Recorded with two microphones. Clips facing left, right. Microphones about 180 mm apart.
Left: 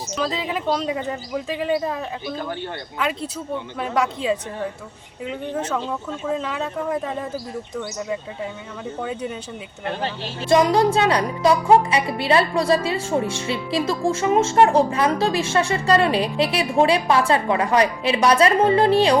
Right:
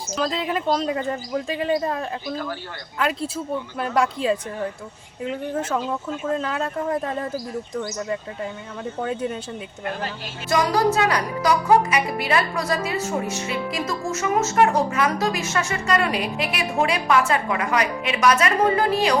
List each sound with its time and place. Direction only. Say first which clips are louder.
0.2 s speech: right 1 dB; centre (ahead or behind)
9.0 s speech: right 3 dB; centre (ahead or behind)
10.5 s speech: left 4 dB; 25° left (ahead or behind)